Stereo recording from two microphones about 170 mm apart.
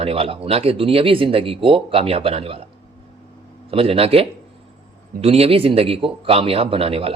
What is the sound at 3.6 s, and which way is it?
A man's voice, 35° right (ahead or behind).